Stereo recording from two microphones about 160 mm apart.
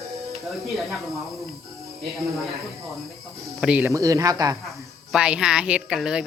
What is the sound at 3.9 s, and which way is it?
Speech, 20° right (ahead or behind).